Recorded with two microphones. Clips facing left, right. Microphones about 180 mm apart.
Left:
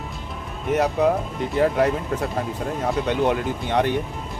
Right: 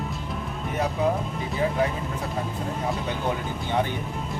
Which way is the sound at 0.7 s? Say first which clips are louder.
Left 6 dB; 75° left (ahead or behind).